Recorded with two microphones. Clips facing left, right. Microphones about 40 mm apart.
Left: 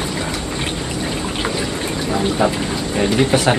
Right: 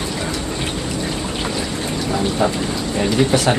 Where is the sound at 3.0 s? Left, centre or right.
Centre.